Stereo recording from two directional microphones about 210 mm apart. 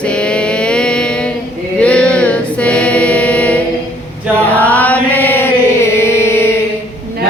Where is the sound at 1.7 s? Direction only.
5° left (ahead or behind).